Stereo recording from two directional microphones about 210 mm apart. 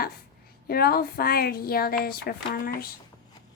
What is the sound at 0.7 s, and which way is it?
A woman's voice, 45° left (ahead or behind).